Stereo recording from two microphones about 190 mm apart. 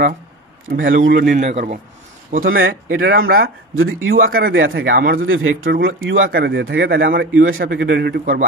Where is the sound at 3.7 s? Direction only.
90° right.